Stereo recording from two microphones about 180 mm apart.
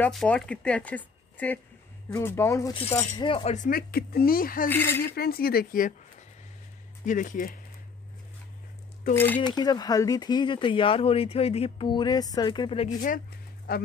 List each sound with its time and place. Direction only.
0.0 s speech: 5° left (ahead or behind)
3.3 s speech: 30° left (ahead or behind)
3.5 s speech: 50° left (ahead or behind)
4.6 s speech: 10° left (ahead or behind)
5.0 s speech: 60° left (ahead or behind)
7.1 s speech: 45° left (ahead or behind)
9.1 s speech: 10° left (ahead or behind)
9.4 s speech: 25° left (ahead or behind)
13.7 s speech: 55° left (ahead or behind)